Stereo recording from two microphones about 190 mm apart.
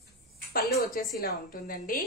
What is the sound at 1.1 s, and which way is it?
Speech, 50° left (ahead or behind).